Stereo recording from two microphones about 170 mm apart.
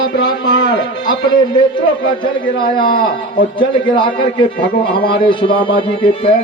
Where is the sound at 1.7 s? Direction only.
30° left (ahead or behind).